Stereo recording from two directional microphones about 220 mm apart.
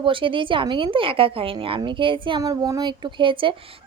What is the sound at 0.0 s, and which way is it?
A woman's voice, 25° right (ahead or behind).